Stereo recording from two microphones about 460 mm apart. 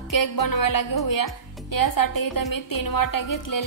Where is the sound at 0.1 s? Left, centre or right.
Left.